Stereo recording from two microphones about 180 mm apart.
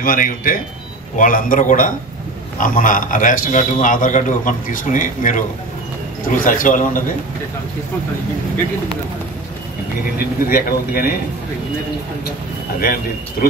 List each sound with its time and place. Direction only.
0.0 s a man's voice: 50° left (ahead or behind)
10.1 s speech: 55° left (ahead or behind)
12.8 s speech: 55° left (ahead or behind)